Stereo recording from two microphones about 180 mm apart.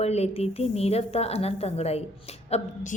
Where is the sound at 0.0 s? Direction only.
35° left (ahead or behind).